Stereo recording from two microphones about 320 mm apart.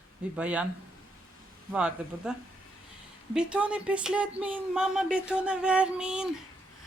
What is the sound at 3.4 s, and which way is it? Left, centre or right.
Speech, centre.